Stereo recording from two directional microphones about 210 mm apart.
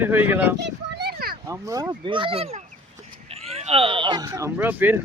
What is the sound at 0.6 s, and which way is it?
Children playing, 50° right (ahead or behind).